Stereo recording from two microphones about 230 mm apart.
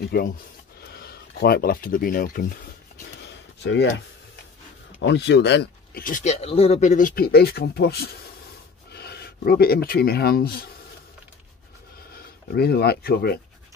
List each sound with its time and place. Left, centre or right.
0.1 s speech: left
3.3 s a sound: left
5.0 s speech: left
12.5 s speech: left